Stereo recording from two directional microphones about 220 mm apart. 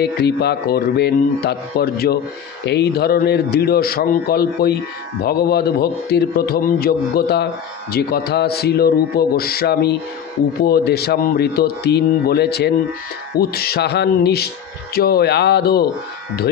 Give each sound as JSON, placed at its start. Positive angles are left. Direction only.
{"t": 0.0, "sound": "a man's voice", "side_deg": 50}